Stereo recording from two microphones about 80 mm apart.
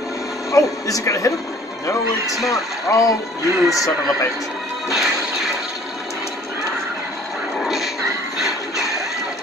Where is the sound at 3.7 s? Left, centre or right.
Left.